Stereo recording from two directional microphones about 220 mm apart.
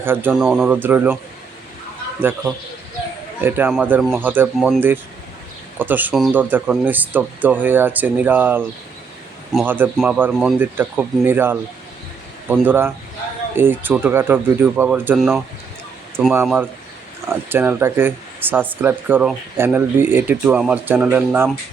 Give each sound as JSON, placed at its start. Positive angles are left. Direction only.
{"t": 0.0, "sound": "speech", "side_deg": -10}
{"t": 3.4, "sound": "speech", "side_deg": -10}